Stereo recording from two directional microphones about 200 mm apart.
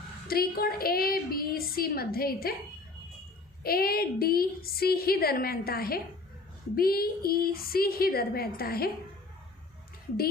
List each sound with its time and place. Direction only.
0.3 s a woman's voice: 50° left (ahead or behind)
3.6 s a woman's voice: 50° left (ahead or behind)